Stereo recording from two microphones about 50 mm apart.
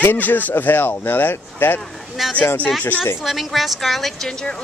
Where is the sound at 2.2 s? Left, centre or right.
Centre.